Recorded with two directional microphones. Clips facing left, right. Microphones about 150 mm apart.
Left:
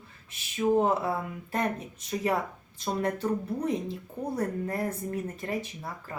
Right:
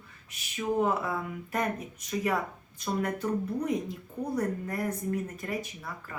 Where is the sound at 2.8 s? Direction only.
30° left (ahead or behind).